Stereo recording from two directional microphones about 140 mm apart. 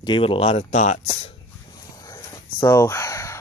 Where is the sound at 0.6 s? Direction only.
55° left (ahead or behind).